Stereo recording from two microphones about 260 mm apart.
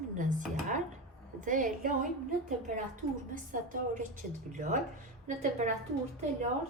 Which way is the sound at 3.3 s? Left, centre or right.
Right.